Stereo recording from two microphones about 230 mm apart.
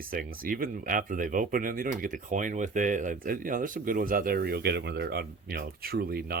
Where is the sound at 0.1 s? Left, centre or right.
Right.